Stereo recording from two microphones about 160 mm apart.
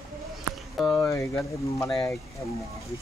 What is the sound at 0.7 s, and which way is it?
Speech, centre (ahead or behind).